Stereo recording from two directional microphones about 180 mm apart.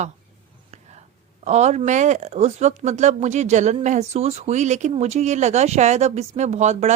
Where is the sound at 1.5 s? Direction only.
40° right (ahead or behind).